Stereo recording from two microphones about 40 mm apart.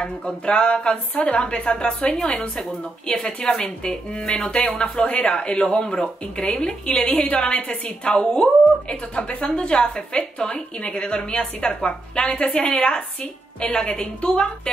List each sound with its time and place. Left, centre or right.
0.0 s a woman's voice: left